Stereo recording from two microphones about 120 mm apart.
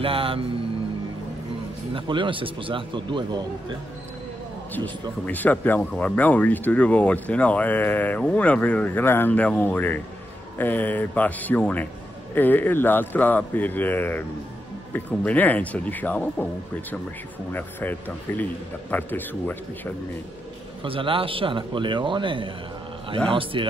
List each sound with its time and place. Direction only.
0.0 s a man's voice: 50° right (ahead or behind)
2.0 s a man's voice: 45° right (ahead or behind)
5.2 s speech: 15° left (ahead or behind)
17.5 s speech: 15° left (ahead or behind)
20.8 s a man's voice: 50° right (ahead or behind)